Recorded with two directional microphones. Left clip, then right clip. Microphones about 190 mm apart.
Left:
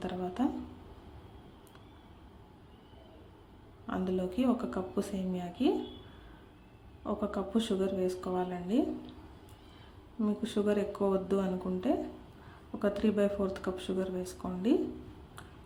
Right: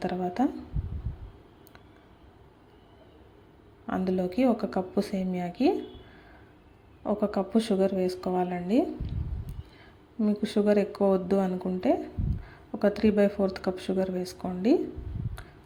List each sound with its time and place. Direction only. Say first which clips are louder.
0.0 s speech: right 7 dB; 25° right (ahead or behind)
3.8 s speech: right 5 dB; 25° right (ahead or behind)
7.0 s speech: right 7 dB; 25° right (ahead or behind)
10.2 s speech: right 6 dB; 25° right (ahead or behind)